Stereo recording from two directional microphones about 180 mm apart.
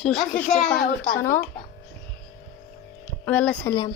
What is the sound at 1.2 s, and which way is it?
Speech, 15° left (ahead or behind).